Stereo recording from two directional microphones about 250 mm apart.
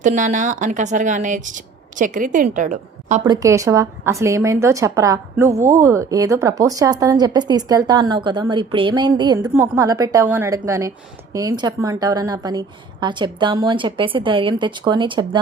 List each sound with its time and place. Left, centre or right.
0.0 s speech: right
3.2 s a woman's voice: centre